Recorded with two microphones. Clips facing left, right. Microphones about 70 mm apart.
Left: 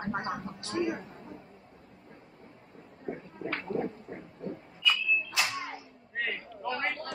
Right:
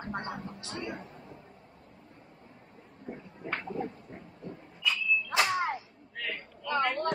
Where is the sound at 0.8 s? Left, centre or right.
Left.